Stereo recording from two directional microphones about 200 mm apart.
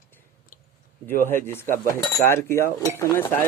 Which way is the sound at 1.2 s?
10° left (ahead or behind).